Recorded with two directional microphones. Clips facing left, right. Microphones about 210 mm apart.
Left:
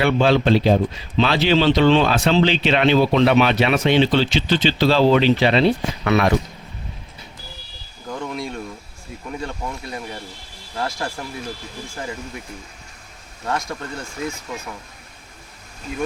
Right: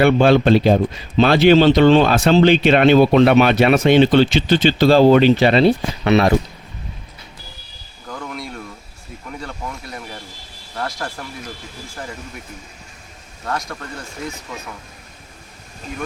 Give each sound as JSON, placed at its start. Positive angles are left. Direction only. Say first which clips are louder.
{"t": 0.0, "sound": "a man's voice", "louder": "right 4 dB", "side_deg": -55}
{"t": 6.1, "sound": "speech", "louder": "right 4 dB", "side_deg": -30}
{"t": 8.2, "sound": "a sound", "louder": "left 3 dB", "side_deg": 25}
{"t": 10.8, "sound": "speech", "louder": "left 1 dB", "side_deg": 25}
{"t": 13.5, "sound": "speech", "louder": "left 1 dB", "side_deg": 25}